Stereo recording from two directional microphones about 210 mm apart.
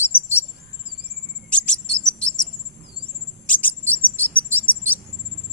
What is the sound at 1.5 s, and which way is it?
Bird, 5° left (ahead or behind).